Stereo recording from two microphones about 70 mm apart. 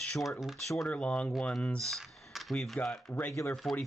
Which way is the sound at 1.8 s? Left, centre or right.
Centre.